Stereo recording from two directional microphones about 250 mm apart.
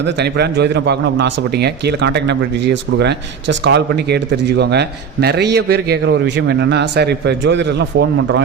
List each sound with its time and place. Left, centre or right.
0.0 s a man's voice: right